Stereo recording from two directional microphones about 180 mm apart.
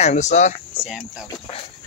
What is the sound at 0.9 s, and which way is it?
Speech, centre (ahead or behind).